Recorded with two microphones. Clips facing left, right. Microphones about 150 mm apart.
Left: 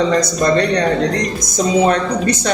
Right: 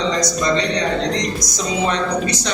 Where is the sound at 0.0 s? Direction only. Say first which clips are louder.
Left 5 dB; 55° left (ahead or behind).